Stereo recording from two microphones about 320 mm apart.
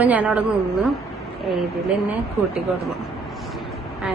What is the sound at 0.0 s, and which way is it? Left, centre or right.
Speech, centre.